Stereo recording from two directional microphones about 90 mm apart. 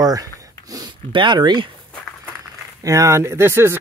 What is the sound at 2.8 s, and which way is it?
Speech, 35° right (ahead or behind).